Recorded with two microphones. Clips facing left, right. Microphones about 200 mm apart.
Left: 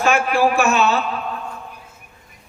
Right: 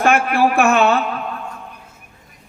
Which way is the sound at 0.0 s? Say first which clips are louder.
Right 2 dB; 55° right (ahead or behind).